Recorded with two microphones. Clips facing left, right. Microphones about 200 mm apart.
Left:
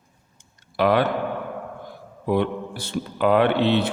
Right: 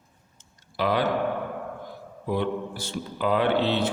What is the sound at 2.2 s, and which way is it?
Speech, 65° left (ahead or behind).